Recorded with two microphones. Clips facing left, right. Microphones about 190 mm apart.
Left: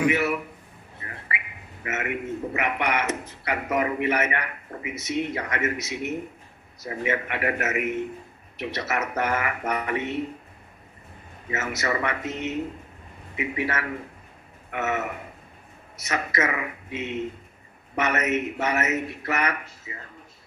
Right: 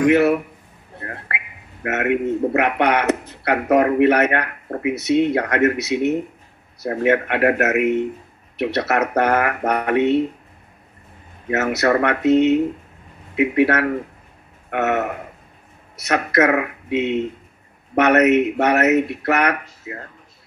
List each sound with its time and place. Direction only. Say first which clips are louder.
0.1 s a man's voice: right 10 dB; 60° right (ahead or behind)
11.4 s a man's voice: right 10 dB; 65° right (ahead or behind)